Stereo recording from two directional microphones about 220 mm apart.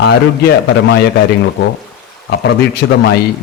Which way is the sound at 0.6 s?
50° left (ahead or behind).